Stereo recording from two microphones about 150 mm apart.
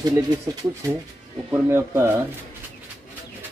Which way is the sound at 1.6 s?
15° right (ahead or behind).